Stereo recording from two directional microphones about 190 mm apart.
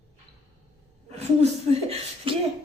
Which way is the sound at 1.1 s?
35° right (ahead or behind).